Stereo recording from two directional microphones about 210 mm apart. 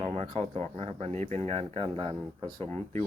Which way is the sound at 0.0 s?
25° right (ahead or behind).